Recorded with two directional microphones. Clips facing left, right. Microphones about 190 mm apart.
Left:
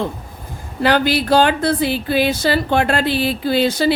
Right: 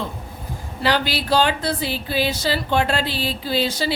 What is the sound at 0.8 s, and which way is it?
A woman's voice, 50° left (ahead or behind).